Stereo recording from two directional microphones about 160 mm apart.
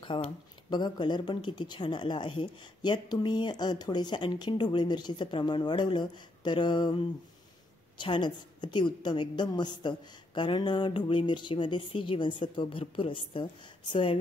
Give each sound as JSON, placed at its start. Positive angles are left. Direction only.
{"t": 0.0, "sound": "speech", "side_deg": 30}